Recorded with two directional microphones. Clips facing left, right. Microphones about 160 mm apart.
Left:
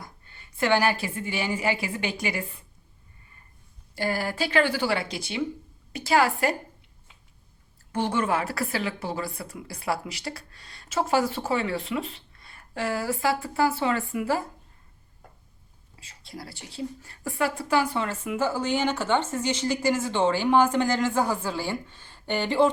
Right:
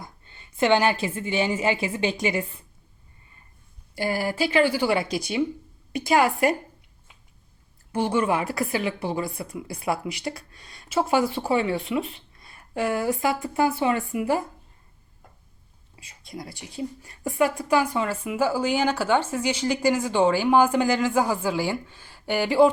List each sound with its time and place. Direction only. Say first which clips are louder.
0.0 s a woman's voice: right 2 dB; 25° right (ahead or behind)
3.9 s speech: right 2 dB; 10° right (ahead or behind)
5.0 s speech: right 7 dB; 25° left (ahead or behind)
5.9 s speech: right 2 dB; 15° right (ahead or behind)
7.9 s speech: right 2 dB; 10° right (ahead or behind)
12.5 s speech: right 4 dB; 20° right (ahead or behind)
16.0 s speech: right 3 dB; 15° right (ahead or behind)